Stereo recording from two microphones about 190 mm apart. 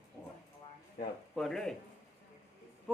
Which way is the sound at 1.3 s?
Centre (ahead or behind).